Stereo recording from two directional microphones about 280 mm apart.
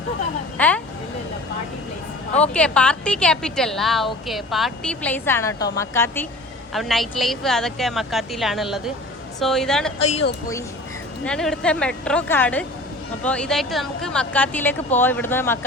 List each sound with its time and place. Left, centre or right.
0.5 s a woman's voice: centre
2.4 s a woman's voice: centre
11.3 s a woman's voice: centre